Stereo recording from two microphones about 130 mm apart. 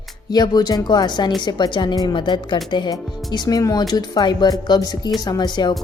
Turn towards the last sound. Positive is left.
turn(degrees=35)  # may be behind; listen again after turning